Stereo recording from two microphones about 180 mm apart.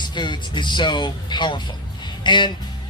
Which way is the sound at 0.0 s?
25° left (ahead or behind).